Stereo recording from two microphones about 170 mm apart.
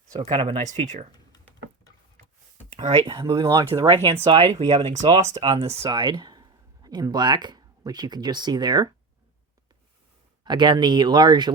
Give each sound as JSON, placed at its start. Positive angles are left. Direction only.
{"t": 0.2, "sound": "speech", "side_deg": -35}
{"t": 0.7, "sound": "speech", "side_deg": -45}
{"t": 2.7, "sound": "speech", "side_deg": -35}
{"t": 4.0, "sound": "speech", "side_deg": -35}
{"t": 5.8, "sound": "speech", "side_deg": -25}
{"t": 10.4, "sound": "speech", "side_deg": -25}